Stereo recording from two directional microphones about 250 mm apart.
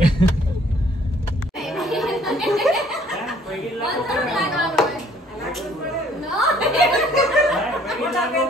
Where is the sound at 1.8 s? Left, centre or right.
Centre.